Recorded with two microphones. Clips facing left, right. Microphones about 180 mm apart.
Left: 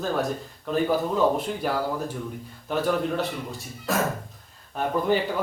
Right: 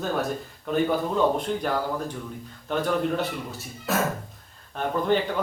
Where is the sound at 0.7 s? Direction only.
5° left (ahead or behind).